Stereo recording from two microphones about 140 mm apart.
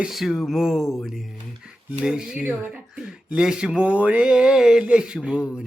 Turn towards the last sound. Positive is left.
turn(degrees=-5)  # may be behind; listen again after turning